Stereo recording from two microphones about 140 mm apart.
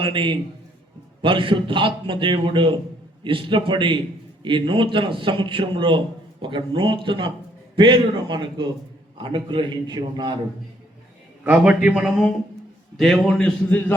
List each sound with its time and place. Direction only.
0.0 s a man's voice: 40° right (ahead or behind)
11.4 s a man's voice: 10° right (ahead or behind); by 13.9 s 10° left (ahead or behind)